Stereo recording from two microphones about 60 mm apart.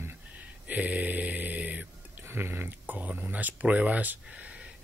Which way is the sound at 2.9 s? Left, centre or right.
Right.